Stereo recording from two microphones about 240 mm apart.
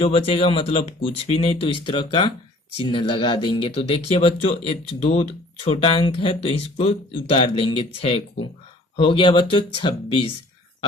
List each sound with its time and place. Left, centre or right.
0.0 s speech: left